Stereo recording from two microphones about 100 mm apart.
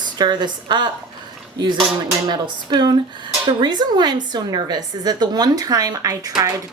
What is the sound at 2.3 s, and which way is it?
A woman's voice, 50° right (ahead or behind).